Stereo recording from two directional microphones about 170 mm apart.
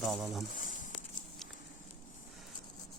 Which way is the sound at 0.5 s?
50° left (ahead or behind).